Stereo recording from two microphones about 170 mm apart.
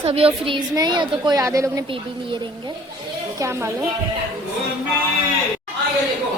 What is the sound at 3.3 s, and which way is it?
Speech, 15° right (ahead or behind).